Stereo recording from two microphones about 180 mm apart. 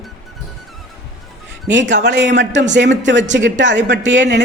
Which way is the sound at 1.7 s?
80° right.